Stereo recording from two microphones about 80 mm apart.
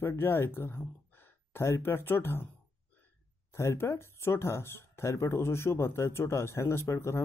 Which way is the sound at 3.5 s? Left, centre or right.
Left.